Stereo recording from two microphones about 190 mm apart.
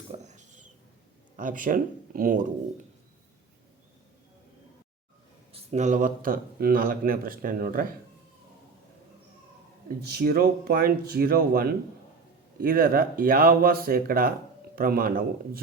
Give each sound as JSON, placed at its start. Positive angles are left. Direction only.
{"t": 0.1, "sound": "a sound", "side_deg": -40}
{"t": 1.4, "sound": "speech", "side_deg": -45}
{"t": 5.5, "sound": "speech", "side_deg": -35}
{"t": 10.0, "sound": "speech", "side_deg": -55}